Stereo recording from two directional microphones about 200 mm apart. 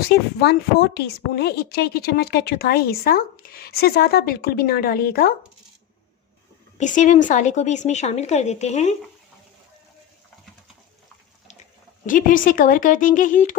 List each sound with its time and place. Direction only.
0.1 s a woman's voice: 55° left (ahead or behind)
6.7 s a woman's voice: 40° left (ahead or behind)
12.0 s a woman's voice: 40° left (ahead or behind)